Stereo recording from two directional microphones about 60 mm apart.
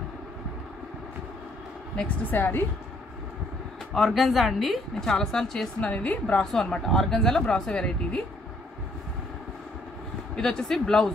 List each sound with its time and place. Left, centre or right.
2.2 s a woman's voice: left
3.9 s speech: centre
5.8 s speech: centre
10.3 s speech: centre